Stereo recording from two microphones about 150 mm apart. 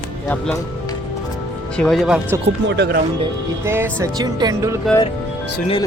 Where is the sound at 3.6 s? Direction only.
15° right (ahead or behind).